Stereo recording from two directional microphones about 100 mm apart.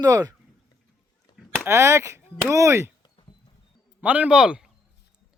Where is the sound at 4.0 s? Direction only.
15° right (ahead or behind).